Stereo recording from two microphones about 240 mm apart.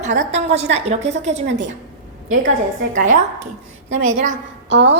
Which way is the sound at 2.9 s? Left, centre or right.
Right.